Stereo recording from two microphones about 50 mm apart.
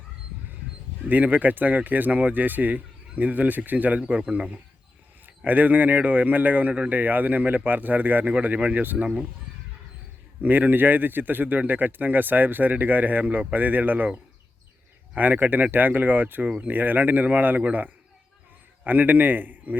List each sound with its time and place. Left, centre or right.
1.0 s speech: right
5.5 s speech: right
10.4 s speech: right